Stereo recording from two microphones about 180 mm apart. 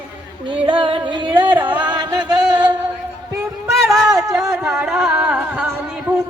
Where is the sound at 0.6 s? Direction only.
25° right (ahead or behind).